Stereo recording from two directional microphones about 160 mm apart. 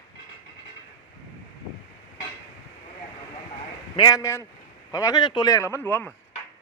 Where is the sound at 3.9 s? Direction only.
25° left (ahead or behind).